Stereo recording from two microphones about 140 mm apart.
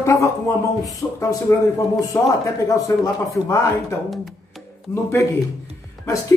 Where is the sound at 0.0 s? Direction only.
20° left (ahead or behind).